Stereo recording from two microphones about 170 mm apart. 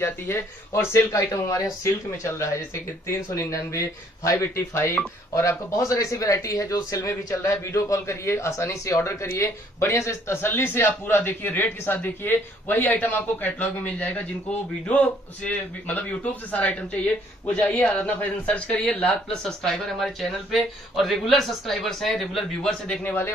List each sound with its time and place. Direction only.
0.0 s a man's voice: 15° left (ahead or behind)